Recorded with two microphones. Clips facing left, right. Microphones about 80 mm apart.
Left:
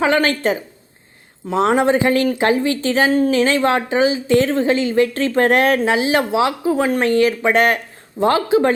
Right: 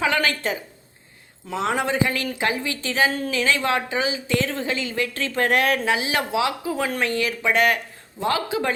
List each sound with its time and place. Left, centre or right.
0.0 s speech: left